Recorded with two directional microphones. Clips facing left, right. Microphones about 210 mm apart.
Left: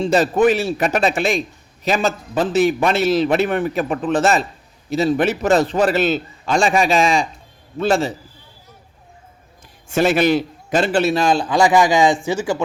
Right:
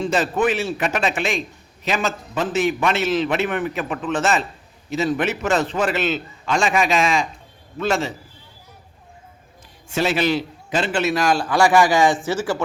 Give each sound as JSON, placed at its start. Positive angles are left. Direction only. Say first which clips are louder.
{"t": 0.0, "sound": "a man's voice", "louder": "left 5 dB", "side_deg": 40}
{"t": 9.9, "sound": "a man's voice", "louder": "left 5 dB", "side_deg": 50}